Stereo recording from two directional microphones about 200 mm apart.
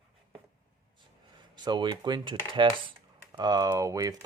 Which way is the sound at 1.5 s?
20° right (ahead or behind).